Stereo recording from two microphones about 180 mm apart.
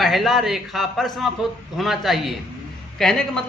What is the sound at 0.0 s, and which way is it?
A man's voice, centre (ahead or behind).